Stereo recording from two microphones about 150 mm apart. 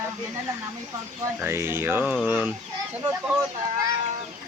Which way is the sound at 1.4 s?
15° right (ahead or behind).